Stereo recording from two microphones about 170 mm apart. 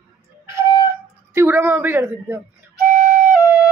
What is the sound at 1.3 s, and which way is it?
A woman's voice, 10° right (ahead or behind).